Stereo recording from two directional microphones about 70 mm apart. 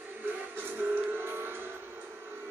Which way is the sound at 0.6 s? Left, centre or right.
Right.